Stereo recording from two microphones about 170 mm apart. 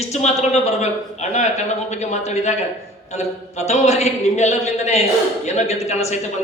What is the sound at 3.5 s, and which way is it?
A man's voice, 40° left (ahead or behind).